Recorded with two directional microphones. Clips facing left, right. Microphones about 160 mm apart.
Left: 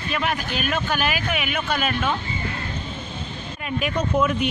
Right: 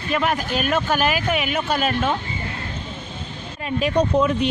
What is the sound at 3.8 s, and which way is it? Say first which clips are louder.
Speech: right 4 dB; 30° right (ahead or behind).